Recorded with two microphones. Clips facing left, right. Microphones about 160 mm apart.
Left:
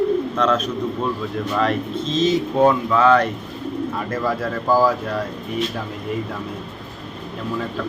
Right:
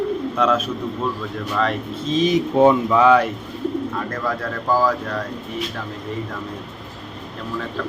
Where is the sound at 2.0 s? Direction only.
10° right (ahead or behind).